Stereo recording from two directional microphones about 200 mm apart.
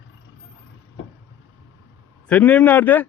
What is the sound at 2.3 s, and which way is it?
Speech, 5° left (ahead or behind).